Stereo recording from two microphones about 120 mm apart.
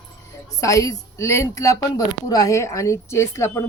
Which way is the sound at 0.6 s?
25° left (ahead or behind).